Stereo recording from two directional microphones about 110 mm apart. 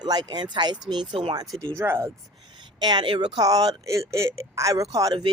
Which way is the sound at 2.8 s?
45° right (ahead or behind).